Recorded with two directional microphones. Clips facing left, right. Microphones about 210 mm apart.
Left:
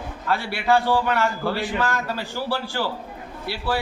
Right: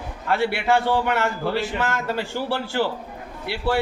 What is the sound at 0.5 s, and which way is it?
A man's voice, 25° right (ahead or behind).